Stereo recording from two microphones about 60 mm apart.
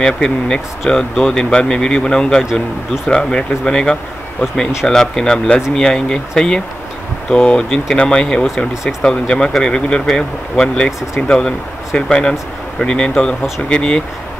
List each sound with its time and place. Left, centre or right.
0.0 s speech: centre